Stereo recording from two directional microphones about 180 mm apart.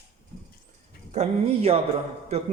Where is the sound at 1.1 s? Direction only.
35° right (ahead or behind).